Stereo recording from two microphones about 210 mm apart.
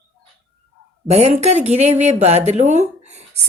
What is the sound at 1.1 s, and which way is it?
A woman's voice, 30° right (ahead or behind).